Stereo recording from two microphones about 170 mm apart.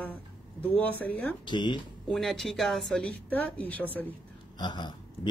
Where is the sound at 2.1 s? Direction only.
Centre (ahead or behind).